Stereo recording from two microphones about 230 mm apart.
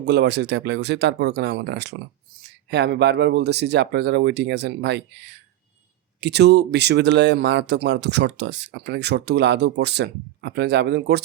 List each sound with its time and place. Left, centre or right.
0.0 s speech: right
6.1 s speech: right